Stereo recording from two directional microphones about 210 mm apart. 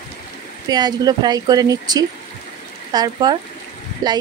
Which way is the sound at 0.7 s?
20° right (ahead or behind).